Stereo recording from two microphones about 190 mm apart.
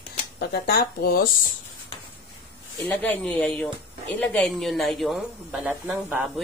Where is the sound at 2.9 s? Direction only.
5° left (ahead or behind).